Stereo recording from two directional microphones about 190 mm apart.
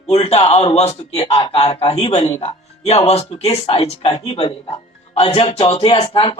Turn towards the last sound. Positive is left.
turn(degrees=25)  # may be behind; listen again after turning